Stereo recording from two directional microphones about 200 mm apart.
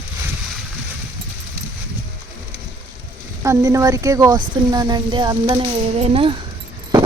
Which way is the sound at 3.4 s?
15° right (ahead or behind).